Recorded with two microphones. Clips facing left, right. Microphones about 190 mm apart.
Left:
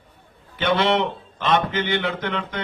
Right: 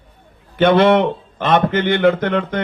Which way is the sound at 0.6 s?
55° right (ahead or behind).